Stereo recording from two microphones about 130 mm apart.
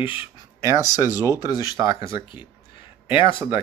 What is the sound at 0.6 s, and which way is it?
Speech, 25° right (ahead or behind).